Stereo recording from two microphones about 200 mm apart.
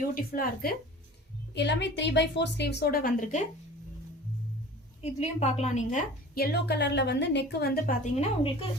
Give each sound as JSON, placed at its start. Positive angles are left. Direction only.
{"t": 0.1, "sound": "a woman's voice", "side_deg": 45}
{"t": 1.5, "sound": "a woman's voice", "side_deg": 60}
{"t": 5.0, "sound": "a woman's voice", "side_deg": 35}
{"t": 6.3, "sound": "a woman's voice", "side_deg": 50}